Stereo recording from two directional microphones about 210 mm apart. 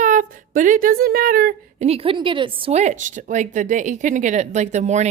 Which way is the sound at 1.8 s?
30° right (ahead or behind).